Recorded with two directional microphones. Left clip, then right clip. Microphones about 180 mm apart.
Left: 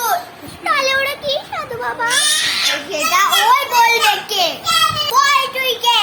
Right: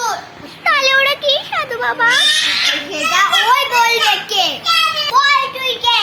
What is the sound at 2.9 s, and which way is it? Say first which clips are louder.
Speech: even; 10° left (ahead or behind).